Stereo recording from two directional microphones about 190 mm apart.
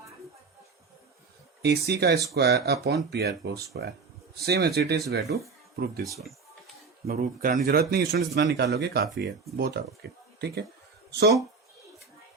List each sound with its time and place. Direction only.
1.6 s speech: 60° right (ahead or behind)
7.1 s speech: 45° right (ahead or behind)